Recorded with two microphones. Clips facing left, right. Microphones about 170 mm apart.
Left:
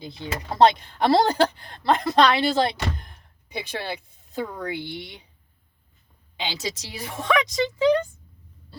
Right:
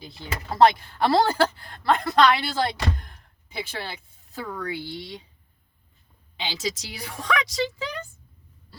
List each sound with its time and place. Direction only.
0.0 s speech: 20° left (ahead or behind)
6.4 s speech: 25° left (ahead or behind)